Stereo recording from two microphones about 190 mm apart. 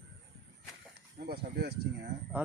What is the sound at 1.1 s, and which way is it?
Speech, 55° right (ahead or behind).